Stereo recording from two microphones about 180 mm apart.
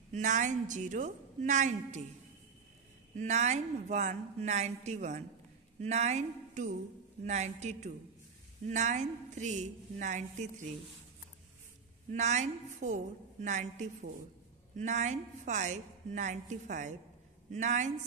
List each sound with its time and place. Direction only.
0.1 s a woman's voice: 45° right (ahead or behind)
3.2 s a woman's voice: 40° right (ahead or behind)
12.1 s a woman's voice: 40° right (ahead or behind)